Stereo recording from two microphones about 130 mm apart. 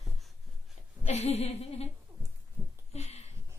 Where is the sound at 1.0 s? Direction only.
55° left (ahead or behind).